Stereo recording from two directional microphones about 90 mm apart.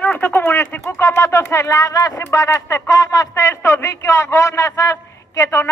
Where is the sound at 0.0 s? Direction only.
20° left (ahead or behind).